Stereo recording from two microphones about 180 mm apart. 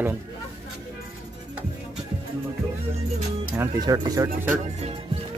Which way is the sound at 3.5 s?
20° right (ahead or behind).